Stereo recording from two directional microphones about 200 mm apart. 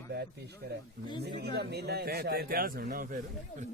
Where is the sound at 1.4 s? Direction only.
55° right (ahead or behind).